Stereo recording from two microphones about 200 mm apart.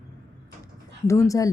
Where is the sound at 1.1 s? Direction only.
15° left (ahead or behind).